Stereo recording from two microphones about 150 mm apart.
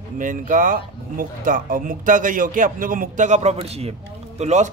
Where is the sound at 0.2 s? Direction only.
60° right (ahead or behind).